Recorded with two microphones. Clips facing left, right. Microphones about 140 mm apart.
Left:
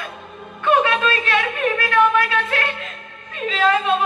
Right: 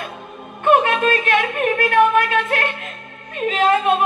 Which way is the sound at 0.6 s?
50° right (ahead or behind).